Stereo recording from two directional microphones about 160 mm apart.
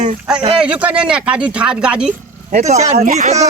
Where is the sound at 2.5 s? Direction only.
45° right (ahead or behind).